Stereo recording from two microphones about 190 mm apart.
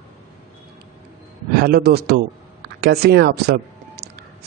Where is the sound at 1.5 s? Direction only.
55° right (ahead or behind).